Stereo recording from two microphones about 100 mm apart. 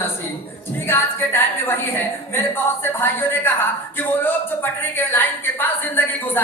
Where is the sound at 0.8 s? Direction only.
20° left (ahead or behind).